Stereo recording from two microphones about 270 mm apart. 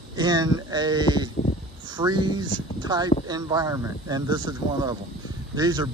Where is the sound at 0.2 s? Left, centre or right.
Centre.